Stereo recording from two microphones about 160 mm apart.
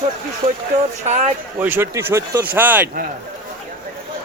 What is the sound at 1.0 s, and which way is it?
Speech, 45° right (ahead or behind).